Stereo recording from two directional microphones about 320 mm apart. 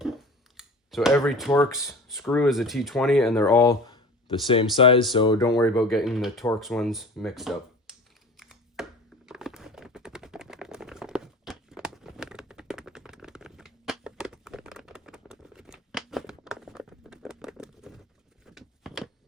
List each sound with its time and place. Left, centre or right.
0.0 s speech: centre
5.9 s speech: centre
8.4 s computer keyboard: centre
18.5 s a sound: centre